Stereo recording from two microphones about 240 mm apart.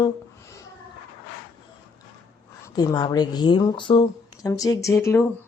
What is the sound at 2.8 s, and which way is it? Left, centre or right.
Speech, centre.